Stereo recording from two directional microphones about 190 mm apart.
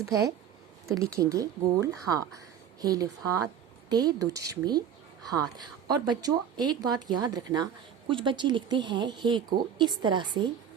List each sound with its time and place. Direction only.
0.0 s a woman's voice: 15° right (ahead or behind)